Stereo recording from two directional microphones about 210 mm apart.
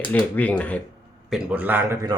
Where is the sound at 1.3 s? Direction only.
5° right (ahead or behind).